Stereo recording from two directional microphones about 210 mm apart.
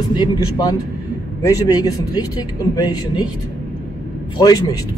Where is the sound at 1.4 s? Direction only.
15° left (ahead or behind).